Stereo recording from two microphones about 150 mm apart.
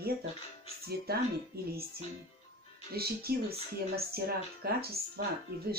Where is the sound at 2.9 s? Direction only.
90° right.